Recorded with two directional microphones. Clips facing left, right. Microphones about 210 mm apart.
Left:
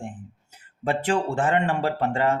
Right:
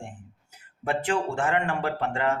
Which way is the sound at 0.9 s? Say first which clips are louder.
Left 3 dB; 25° left (ahead or behind).